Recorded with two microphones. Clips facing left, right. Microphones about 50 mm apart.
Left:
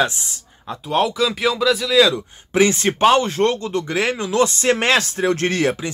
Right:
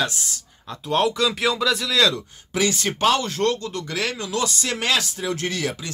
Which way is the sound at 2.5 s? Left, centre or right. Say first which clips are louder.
Left 6 dB; left.